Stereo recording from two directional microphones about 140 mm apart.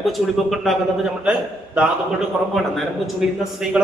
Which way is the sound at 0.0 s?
Centre (ahead or behind).